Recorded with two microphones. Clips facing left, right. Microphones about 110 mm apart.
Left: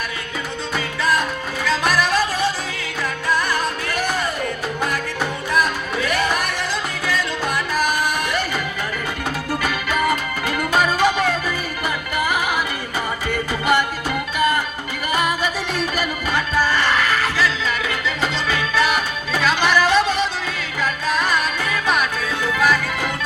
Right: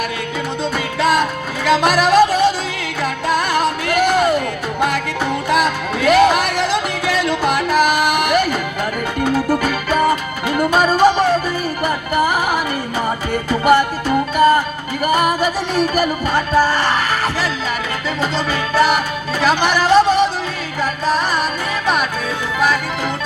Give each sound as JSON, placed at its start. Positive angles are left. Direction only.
{"t": 1.6, "sound": "music", "side_deg": -65}
{"t": 5.5, "sound": "music", "side_deg": -80}
{"t": 9.5, "sound": "music", "side_deg": -45}
{"t": 10.0, "sound": "music", "side_deg": -30}
{"t": 18.2, "sound": "music", "side_deg": -40}
{"t": 21.3, "sound": "music", "side_deg": -30}